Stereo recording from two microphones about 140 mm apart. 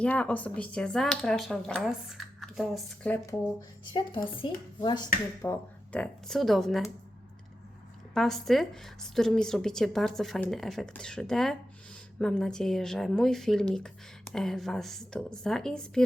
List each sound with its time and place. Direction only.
0.0 s speech: 10° left (ahead or behind)
3.1 s speech: 10° left (ahead or behind)
3.9 s speech: 35° left (ahead or behind)
5.4 s speech: 20° left (ahead or behind)
6.0 s speech: 5° left (ahead or behind)
8.1 s speech: centre (ahead or behind)